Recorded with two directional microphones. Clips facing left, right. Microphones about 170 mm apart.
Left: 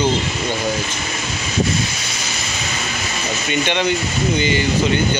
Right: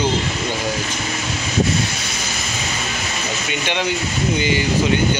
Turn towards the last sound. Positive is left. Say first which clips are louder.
# left 3 dB
turn(degrees=-10)  # may be behind; listen again after turning